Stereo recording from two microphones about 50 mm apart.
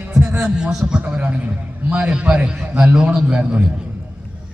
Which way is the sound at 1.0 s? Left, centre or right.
Right.